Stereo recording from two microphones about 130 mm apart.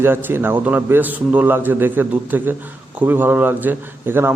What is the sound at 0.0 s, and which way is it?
A man's voice, 15° right (ahead or behind).